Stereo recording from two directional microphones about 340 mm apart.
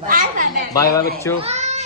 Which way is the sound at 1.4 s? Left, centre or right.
Centre.